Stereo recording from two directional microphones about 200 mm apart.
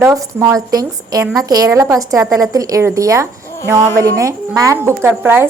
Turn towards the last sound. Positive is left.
turn(degrees=-10)  # may be behind; listen again after turning